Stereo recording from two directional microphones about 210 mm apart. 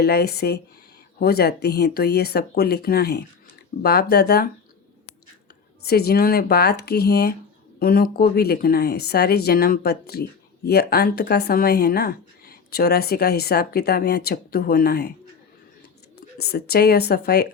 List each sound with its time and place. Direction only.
0.0 s speech: 50° left (ahead or behind)
5.8 s speech: 50° left (ahead or behind)
16.4 s speech: 50° left (ahead or behind)